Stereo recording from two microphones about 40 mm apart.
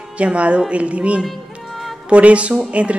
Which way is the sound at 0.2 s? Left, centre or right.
Right.